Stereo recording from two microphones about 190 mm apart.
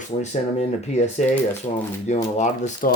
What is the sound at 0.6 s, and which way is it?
Speech, 35° left (ahead or behind).